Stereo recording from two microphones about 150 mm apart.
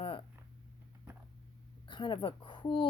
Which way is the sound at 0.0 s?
35° left (ahead or behind).